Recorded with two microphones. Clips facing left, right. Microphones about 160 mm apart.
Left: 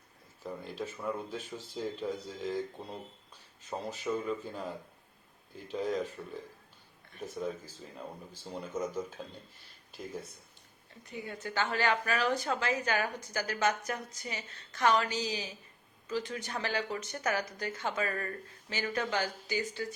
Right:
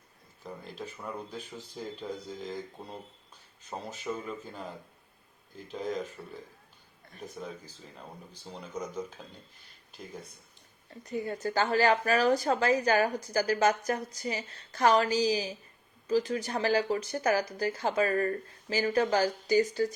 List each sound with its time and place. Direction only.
0.4 s speech: centre (ahead or behind)
8.5 s speech: 5° left (ahead or behind)
11.0 s a woman's voice: 40° right (ahead or behind)